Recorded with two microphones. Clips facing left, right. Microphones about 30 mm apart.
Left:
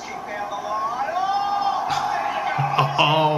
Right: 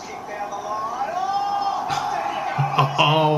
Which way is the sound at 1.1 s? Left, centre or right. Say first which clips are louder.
Left 1 dB; left.